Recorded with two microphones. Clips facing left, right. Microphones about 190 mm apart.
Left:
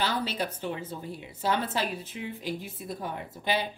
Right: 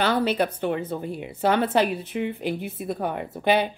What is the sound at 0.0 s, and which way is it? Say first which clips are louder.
A woman's voice: right 8 dB; 60° right (ahead or behind).